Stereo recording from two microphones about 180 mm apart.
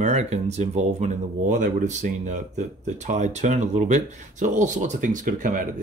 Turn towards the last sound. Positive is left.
turn(degrees=-45)  # may be behind; listen again after turning